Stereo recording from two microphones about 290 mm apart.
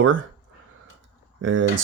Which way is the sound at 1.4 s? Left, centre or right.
Right.